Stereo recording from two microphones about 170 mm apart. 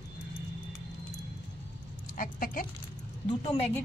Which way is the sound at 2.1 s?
55° left (ahead or behind).